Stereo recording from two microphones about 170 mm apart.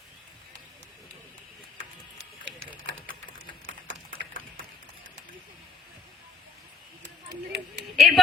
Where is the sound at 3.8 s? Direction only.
60° right (ahead or behind).